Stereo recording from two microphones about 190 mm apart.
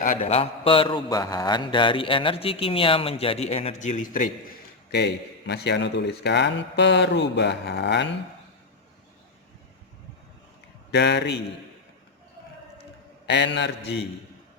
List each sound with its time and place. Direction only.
0.0 s a man's voice: 35° left (ahead or behind)
4.9 s a man's voice: 60° left (ahead or behind)
10.9 s a man's voice: 65° left (ahead or behind)
13.2 s a man's voice: 65° left (ahead or behind)